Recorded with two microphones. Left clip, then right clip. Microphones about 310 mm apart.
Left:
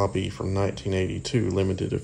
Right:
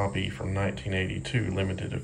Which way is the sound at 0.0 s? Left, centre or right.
Centre.